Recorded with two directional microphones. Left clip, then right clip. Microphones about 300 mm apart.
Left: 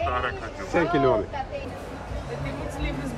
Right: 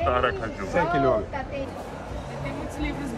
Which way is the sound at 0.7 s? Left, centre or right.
Left.